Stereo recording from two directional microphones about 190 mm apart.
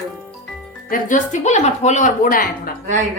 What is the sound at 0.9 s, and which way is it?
A woman's voice, 40° left (ahead or behind).